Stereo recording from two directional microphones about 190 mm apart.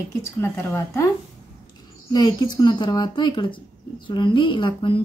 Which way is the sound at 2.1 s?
20° left (ahead or behind).